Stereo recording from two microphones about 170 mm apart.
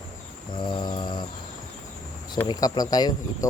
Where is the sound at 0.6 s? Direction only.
25° left (ahead or behind).